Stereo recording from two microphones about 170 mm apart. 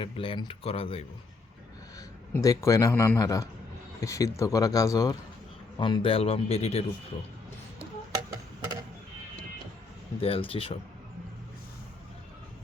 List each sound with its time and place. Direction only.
0.0 s a man's voice: 30° left (ahead or behind)
2.0 s a man's voice: 20° left (ahead or behind); by 6.8 s 35° left (ahead or behind)
10.2 s a man's voice: 35° left (ahead or behind)